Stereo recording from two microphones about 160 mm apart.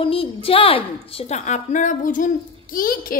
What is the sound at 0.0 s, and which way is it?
A woman's voice, 35° left (ahead or behind).